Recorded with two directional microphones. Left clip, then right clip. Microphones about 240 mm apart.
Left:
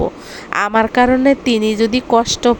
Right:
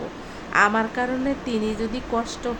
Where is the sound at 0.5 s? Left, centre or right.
Left.